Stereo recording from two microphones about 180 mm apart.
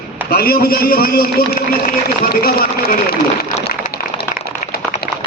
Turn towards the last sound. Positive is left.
turn(degrees=55)  # may be behind; listen again after turning